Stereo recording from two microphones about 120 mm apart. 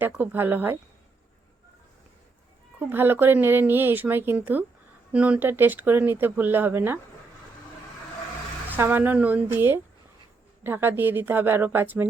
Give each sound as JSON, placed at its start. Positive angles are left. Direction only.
{"t": 0.1, "sound": "speech", "side_deg": -15}
{"t": 2.7, "sound": "speech", "side_deg": -15}
{"t": 8.7, "sound": "speech", "side_deg": -15}